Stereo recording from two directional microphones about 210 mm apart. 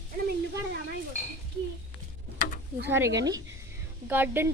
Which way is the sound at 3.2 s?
15° right (ahead or behind).